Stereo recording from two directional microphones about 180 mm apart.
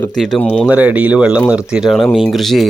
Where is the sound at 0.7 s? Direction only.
10° right (ahead or behind).